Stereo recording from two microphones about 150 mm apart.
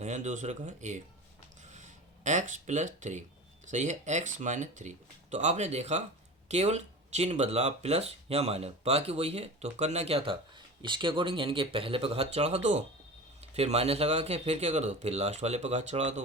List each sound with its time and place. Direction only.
0.0 s speech: 55° right (ahead or behind)
1.6 s a sound: 50° right (ahead or behind)
3.7 s speech: 55° right (ahead or behind)